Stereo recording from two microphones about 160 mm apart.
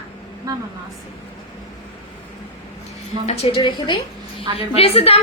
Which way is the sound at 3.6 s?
25° left (ahead or behind).